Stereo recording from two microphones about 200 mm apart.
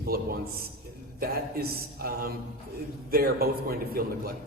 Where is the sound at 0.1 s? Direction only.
50° right (ahead or behind).